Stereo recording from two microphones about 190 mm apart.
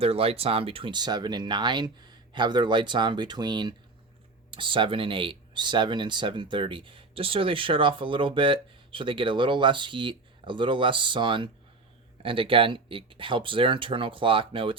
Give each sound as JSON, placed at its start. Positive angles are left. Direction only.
{"t": 0.0, "sound": "speech", "side_deg": -30}